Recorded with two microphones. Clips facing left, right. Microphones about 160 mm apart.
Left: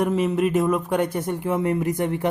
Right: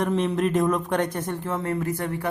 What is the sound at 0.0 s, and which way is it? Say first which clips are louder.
Speech: left 2 dB; 5° left (ahead or behind).